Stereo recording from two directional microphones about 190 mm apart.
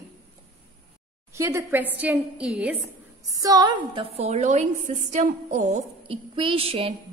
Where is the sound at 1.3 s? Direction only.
15° right (ahead or behind).